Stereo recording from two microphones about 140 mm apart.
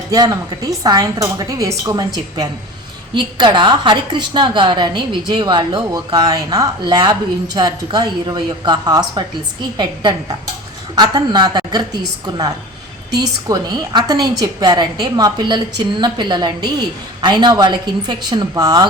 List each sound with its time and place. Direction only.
0.1 s a woman's voice: 25° right (ahead or behind)
13.1 s a woman's voice: 30° right (ahead or behind)